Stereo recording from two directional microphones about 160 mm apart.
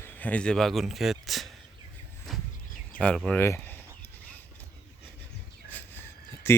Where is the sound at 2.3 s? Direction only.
Centre (ahead or behind).